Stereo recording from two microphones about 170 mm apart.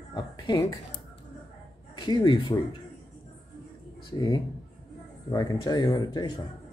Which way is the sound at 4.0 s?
25° left (ahead or behind).